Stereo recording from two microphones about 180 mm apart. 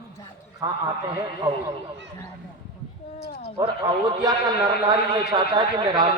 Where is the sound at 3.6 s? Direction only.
20° right (ahead or behind).